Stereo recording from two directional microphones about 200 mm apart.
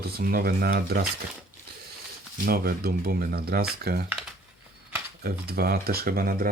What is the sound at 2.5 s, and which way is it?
Speech, 50° right (ahead or behind).